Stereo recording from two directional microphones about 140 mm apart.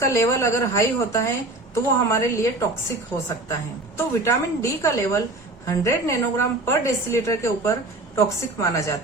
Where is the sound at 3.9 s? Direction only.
20° left (ahead or behind).